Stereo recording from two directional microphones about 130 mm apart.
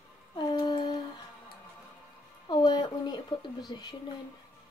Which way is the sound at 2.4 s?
35° left (ahead or behind).